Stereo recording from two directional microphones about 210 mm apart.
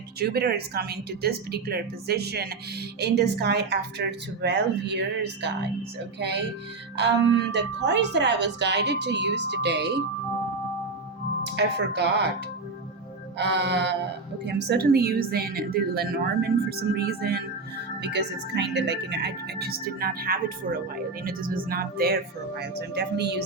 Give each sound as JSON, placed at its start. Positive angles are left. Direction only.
{"t": 0.2, "sound": "a woman's voice", "side_deg": -50}
{"t": 6.9, "sound": "a woman's voice", "side_deg": -55}
{"t": 11.4, "sound": "speech", "side_deg": -55}
{"t": 13.4, "sound": "a woman's voice", "side_deg": -55}